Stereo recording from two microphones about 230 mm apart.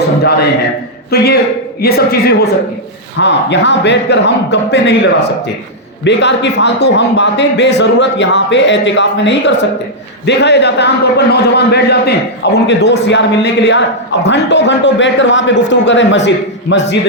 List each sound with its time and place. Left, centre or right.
0.2 s a man's voice: left
6.1 s a man's voice: left